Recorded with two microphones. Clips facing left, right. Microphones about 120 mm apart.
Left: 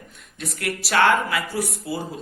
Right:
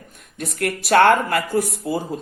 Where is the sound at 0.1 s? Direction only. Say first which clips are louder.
Right 4 dB; 50° right (ahead or behind).